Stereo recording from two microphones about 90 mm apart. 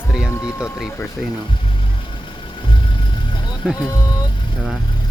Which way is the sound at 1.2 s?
10° left (ahead or behind).